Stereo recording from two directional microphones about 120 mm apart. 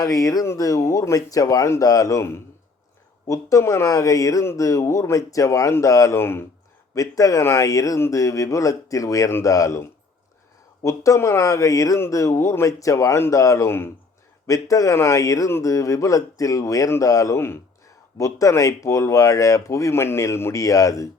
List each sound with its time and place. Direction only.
0.0 s a man's voice: 30° left (ahead or behind)
10.8 s a man's voice: 25° left (ahead or behind)